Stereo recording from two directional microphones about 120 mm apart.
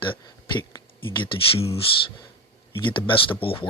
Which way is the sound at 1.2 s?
50° left (ahead or behind).